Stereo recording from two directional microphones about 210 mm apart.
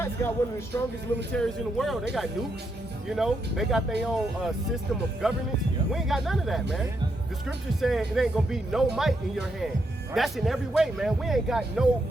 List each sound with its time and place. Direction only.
0.0 s speech: 10° left (ahead or behind)
1.3 s speech: centre (ahead or behind)
3.1 s speech: centre (ahead or behind)